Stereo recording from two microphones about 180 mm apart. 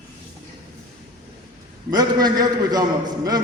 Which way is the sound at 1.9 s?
20° right (ahead or behind).